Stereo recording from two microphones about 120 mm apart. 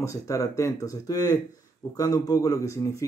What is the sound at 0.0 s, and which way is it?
Speech, 25° left (ahead or behind).